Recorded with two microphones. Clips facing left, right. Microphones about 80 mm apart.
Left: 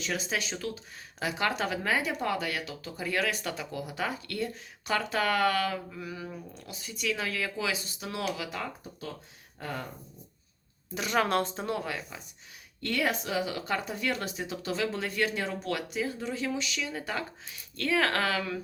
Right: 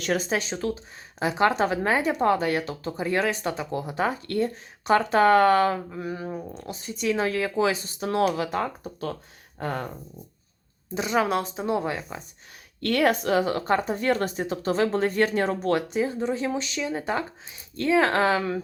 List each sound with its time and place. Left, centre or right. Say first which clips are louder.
0.0 s speech: right 8 dB; right
0.3 s speech: right 6 dB; right
10.9 s speech: right 5 dB; right
11.2 s speech: right 1 dB; centre
11.6 s speech: right 7 dB; right
12.8 s speech: right 8 dB; right